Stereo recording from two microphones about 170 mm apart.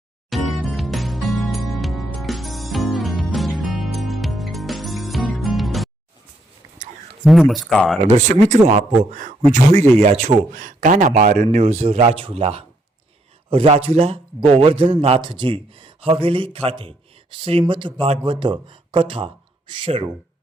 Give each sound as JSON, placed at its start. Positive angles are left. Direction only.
{"t": 0.3, "sound": "music", "side_deg": 0}
{"t": 7.3, "sound": "speech", "side_deg": 0}
{"t": 8.0, "sound": "a man's voice", "side_deg": -45}
{"t": 11.5, "sound": "a man's voice", "side_deg": -40}